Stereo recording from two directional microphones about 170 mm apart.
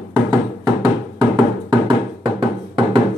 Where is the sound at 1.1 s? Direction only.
25° right (ahead or behind).